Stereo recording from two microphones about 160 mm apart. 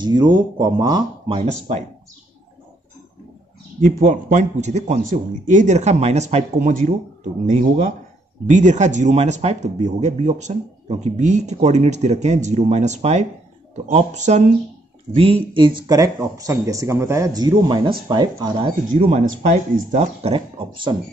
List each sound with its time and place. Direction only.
0.0 s speech: 30° right (ahead or behind)
1.7 s speech: 45° right (ahead or behind)
3.8 s speech: 50° right (ahead or behind)
8.5 s speech: 50° right (ahead or behind); by 19.0 s 30° right (ahead or behind)
19.0 s speech: 50° right (ahead or behind); by 20.9 s 30° right (ahead or behind)